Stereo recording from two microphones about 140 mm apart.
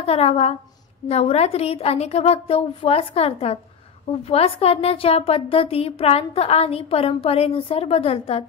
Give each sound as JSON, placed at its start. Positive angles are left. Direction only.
{"t": 0.0, "sound": "a woman's voice", "side_deg": 45}